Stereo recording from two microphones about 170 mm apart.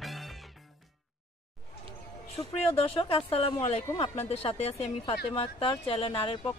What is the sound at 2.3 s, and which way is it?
Speech, 35° left (ahead or behind).